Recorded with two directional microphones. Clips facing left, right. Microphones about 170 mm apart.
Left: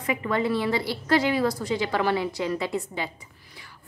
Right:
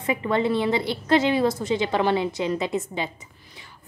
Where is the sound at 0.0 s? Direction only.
25° right (ahead or behind).